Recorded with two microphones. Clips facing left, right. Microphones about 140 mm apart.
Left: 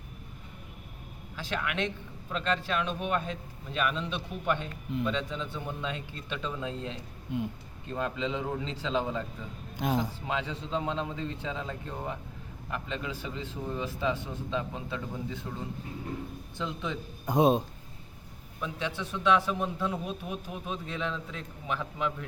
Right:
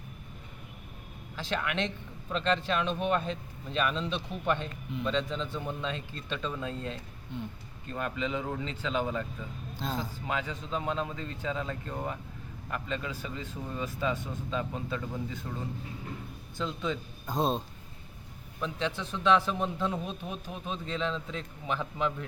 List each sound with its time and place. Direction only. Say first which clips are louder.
1.4 s a man's voice: right 1 dB; 5° left (ahead or behind); by 9.2 s 25° left (ahead or behind)
9.7 s a man's voice: left 6 dB; 15° left (ahead or behind)
15.5 s a man's voice: even; 5° left (ahead or behind)
16.6 s a man's voice: right 2 dB; 15° left (ahead or behind)
18.6 s a man's voice: right 1 dB; 5° left (ahead or behind)